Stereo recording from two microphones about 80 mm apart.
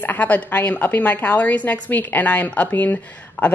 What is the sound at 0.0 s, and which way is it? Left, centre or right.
A woman's voice, left.